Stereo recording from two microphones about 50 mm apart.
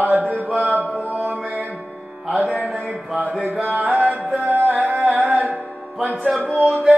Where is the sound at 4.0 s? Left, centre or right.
Right.